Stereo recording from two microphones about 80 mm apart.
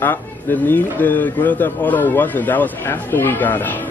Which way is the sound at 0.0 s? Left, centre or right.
Left.